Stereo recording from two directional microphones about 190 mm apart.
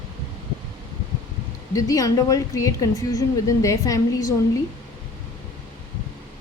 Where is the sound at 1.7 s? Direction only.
20° left (ahead or behind).